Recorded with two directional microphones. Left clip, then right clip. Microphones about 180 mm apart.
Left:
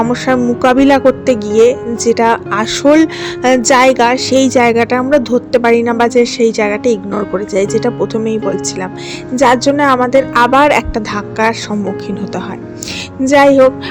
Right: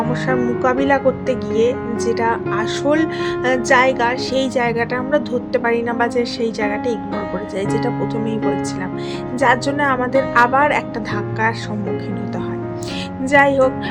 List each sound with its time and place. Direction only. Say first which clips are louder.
0.1 s a woman's voice: left 6 dB; 40° left (ahead or behind)
13.2 s a woman's voice: left 7 dB; 35° left (ahead or behind)